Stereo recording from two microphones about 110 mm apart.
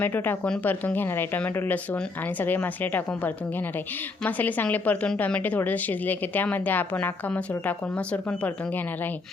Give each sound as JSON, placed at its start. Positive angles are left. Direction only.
{"t": 0.0, "sound": "a woman's voice", "side_deg": 15}